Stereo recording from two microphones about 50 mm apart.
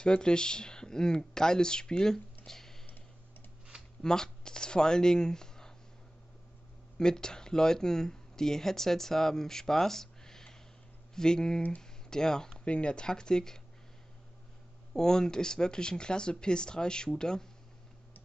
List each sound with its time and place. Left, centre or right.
0.0 s speech: centre
4.0 s speech: centre
7.0 s speech: centre
15.0 s speech: centre